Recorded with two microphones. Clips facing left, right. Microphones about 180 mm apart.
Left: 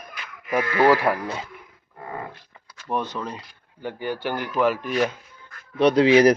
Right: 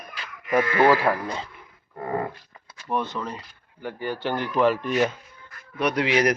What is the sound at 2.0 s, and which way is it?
Livestock, 40° right (ahead or behind).